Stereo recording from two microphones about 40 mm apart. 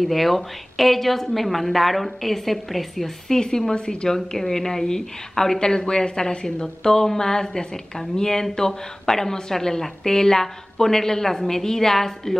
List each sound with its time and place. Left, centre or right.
0.0 s a woman's voice: centre
3.3 s a woman's voice: centre